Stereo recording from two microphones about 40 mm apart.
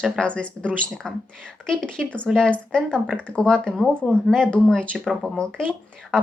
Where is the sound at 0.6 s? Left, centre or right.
Centre.